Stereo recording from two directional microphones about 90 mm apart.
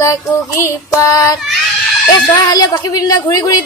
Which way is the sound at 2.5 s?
45° left (ahead or behind).